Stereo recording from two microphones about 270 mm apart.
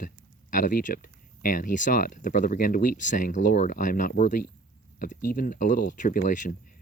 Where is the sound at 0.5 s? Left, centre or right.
Left.